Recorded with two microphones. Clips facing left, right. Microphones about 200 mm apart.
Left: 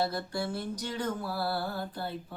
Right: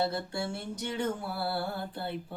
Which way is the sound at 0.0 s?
25° right (ahead or behind).